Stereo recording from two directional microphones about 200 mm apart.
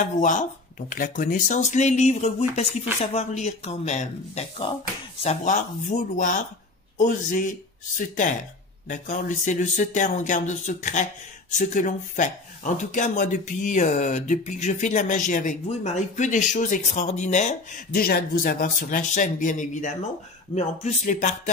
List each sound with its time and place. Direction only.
0.0 s speech: 40° left (ahead or behind)
8.8 s speech: 40° left (ahead or behind)